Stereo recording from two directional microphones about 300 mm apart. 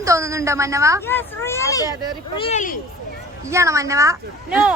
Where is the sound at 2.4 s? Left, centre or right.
Left.